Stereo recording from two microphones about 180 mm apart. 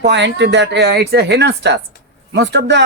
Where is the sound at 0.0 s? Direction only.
75° right (ahead or behind).